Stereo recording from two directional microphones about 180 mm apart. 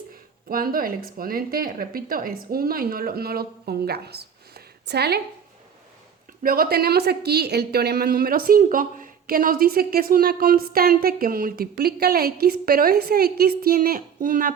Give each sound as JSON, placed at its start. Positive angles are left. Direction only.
{"t": 0.4, "sound": "a woman's voice", "side_deg": -55}
{"t": 6.4, "sound": "a woman's voice", "side_deg": -55}